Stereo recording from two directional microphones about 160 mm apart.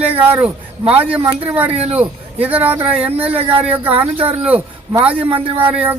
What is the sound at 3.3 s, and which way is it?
Speech, 40° right (ahead or behind).